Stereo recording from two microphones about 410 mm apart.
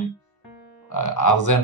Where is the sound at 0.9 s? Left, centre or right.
Left.